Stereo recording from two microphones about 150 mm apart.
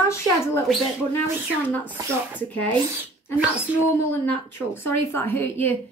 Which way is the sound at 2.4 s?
10° left (ahead or behind).